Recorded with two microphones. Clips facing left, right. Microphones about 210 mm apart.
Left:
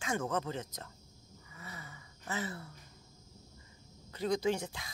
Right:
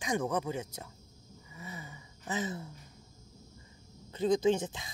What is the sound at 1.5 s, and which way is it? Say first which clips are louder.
Gasp: right 4 dB; 15° right (ahead or behind).